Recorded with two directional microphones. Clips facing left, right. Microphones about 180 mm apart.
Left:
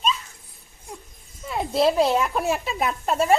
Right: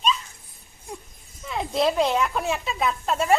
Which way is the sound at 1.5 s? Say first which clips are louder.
Left 2 dB; 5° left (ahead or behind).